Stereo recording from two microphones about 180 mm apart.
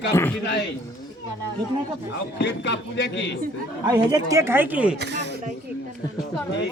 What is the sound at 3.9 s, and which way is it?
A woman's voice, 20° right (ahead or behind).